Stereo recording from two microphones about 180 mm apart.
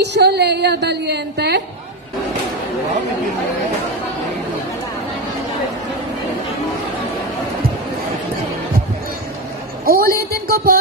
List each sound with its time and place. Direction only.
0.0 s a woman's voice: 70° right (ahead or behind)
9.8 s speech: 55° right (ahead or behind)